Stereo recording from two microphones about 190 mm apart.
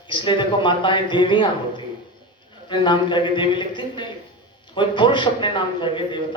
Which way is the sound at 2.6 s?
25° left (ahead or behind).